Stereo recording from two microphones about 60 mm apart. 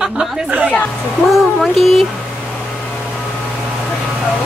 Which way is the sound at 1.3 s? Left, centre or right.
Centre.